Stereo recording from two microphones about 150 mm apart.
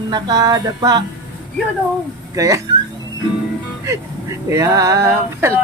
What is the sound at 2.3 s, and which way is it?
Speech, 25° right (ahead or behind).